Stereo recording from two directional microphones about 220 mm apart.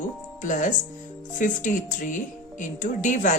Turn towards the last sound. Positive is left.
turn(degrees=35)  # may be behind; listen again after turning